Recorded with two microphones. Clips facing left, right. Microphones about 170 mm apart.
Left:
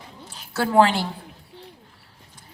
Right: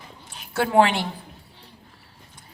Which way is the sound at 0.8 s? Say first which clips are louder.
Left 1 dB; 30° left (ahead or behind).